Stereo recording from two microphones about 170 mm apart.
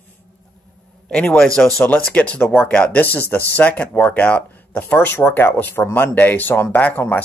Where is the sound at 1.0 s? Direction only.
10° left (ahead or behind).